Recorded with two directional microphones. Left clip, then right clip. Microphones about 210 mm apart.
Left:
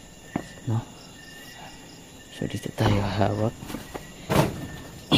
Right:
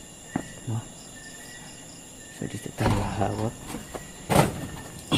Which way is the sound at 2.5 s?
40° left (ahead or behind).